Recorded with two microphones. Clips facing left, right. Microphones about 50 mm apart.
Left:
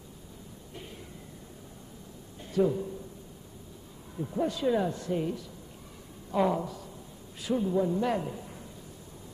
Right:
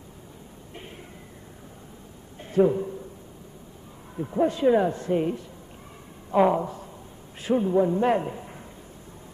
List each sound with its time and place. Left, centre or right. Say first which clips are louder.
2.5 s speech: right 6 dB; right
4.2 s a woman's voice: right 7 dB; right